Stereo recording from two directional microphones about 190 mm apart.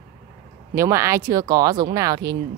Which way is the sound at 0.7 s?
15° right (ahead or behind).